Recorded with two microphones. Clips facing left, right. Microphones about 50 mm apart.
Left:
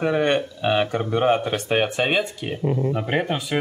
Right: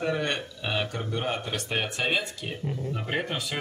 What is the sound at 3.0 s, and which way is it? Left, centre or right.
Speech, centre.